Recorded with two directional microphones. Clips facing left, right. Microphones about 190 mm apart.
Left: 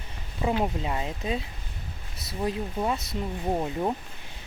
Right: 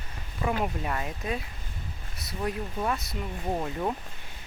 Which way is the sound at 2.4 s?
20° left (ahead or behind).